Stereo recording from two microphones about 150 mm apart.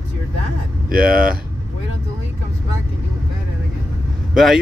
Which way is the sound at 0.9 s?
75° right (ahead or behind).